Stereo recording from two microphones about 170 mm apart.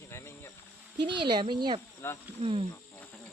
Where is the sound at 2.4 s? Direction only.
35° right (ahead or behind).